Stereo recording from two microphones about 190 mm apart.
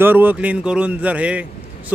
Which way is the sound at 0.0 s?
10° right (ahead or behind).